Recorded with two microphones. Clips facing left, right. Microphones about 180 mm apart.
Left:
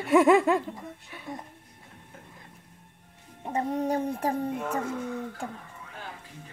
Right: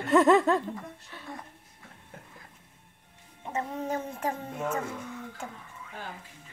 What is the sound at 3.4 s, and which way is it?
Speech, 40° left (ahead or behind).